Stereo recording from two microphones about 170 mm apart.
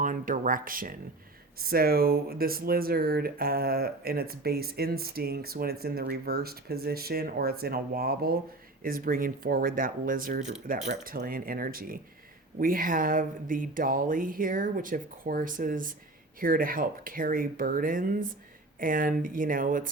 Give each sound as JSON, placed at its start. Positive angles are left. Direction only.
{"t": 0.0, "sound": "speech", "side_deg": -50}